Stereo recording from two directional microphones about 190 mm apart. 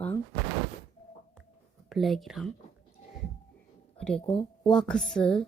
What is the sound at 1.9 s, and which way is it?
Speech, centre (ahead or behind).